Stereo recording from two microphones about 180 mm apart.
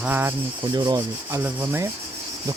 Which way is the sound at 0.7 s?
20° right (ahead or behind).